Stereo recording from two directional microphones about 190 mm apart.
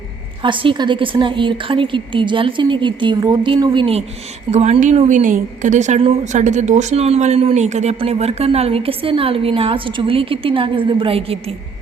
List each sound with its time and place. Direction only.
0.4 s a woman's voice: 25° right (ahead or behind)